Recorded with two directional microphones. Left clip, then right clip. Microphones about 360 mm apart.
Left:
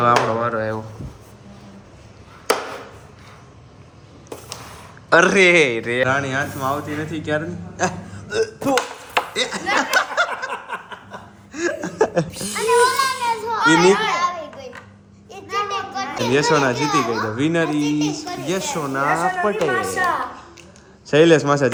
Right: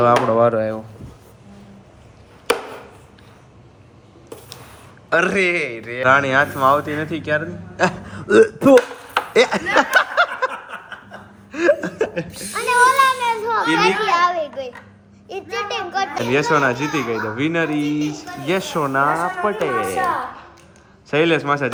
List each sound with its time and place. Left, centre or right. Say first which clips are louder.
0.0 s a child's voice: right 3 dB; centre
5.0 s a child's voice: left 4 dB; centre
9.1 s a sound: right 6 dB; centre
11.5 s chuckle: right 5 dB; centre
12.3 s a child's voice: left 3 dB; centre
13.3 s children playing: left 2 dB; right
16.3 s a child's voice: even; centre